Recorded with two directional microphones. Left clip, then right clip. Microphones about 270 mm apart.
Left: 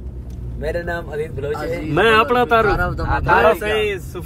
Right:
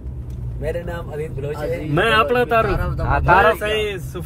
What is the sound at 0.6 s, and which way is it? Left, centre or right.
Speech, left.